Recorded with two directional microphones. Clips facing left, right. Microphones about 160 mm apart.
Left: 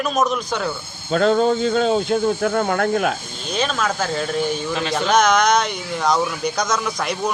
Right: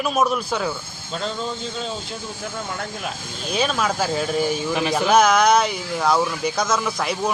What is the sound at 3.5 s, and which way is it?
A man's voice, 10° right (ahead or behind).